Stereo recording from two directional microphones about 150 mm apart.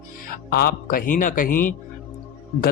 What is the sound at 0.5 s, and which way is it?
A man's voice, 75° left (ahead or behind).